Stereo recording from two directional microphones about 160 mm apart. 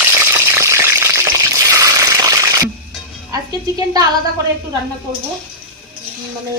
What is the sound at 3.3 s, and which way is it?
Speech, 25° right (ahead or behind).